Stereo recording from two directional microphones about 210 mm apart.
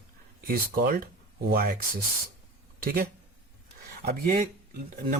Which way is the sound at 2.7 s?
45° right (ahead or behind).